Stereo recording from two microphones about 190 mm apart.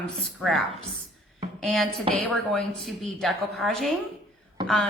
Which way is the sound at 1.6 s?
Centre (ahead or behind).